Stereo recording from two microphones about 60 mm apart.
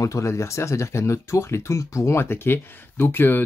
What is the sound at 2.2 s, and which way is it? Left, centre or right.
Speech, left.